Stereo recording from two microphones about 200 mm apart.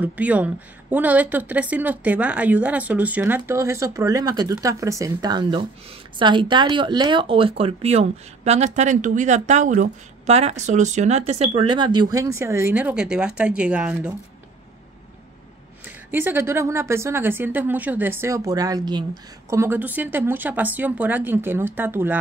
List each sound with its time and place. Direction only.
0.0 s a woman's voice: 5° right (ahead or behind)
15.8 s a woman's voice: 10° right (ahead or behind)